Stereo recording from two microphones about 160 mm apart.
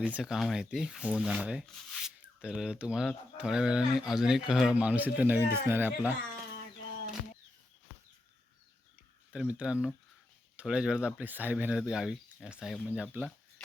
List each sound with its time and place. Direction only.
0.0 s speech: 5° right (ahead or behind)
9.3 s speech: 5° right (ahead or behind)